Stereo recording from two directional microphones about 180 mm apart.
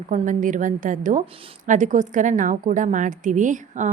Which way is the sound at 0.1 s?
45° right (ahead or behind).